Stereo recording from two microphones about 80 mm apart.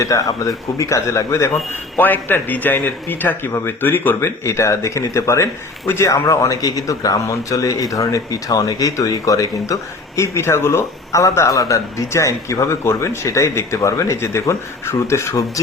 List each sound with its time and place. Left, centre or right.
0.0 s speech: left
2.0 s speech: left
10.2 s speech: left